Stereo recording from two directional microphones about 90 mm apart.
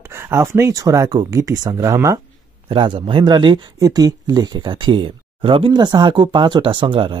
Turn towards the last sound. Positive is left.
turn(degrees=-70)  # may be behind; listen again after turning